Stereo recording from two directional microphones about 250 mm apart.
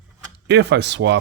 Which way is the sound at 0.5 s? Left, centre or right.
Right.